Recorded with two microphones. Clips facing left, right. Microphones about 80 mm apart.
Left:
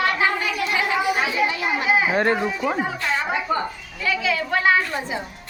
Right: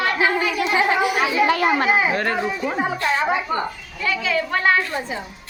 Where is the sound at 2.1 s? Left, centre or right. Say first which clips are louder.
Left 2 dB; left.